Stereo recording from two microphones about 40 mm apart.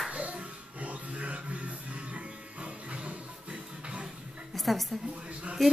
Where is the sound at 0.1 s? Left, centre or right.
Right.